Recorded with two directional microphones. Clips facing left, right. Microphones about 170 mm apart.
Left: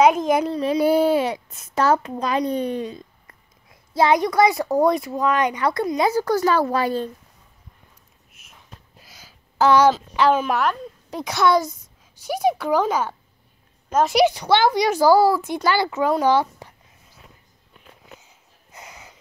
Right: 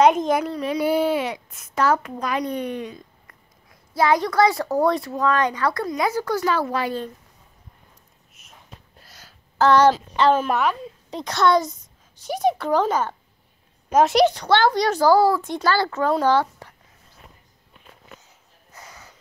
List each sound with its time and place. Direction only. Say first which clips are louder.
0.0 s speech: even; 5° left (ahead or behind)
0.3 s a child's voice: left 3 dB; 25° left (ahead or behind)
6.2 s a child's voice: left 3 dB; 40° left (ahead or behind)
8.4 s a sound: right 1 dB; centre (ahead or behind)
10.1 s a child's voice: even; centre (ahead or behind)
18.7 s a sound: left 2 dB; 15° left (ahead or behind)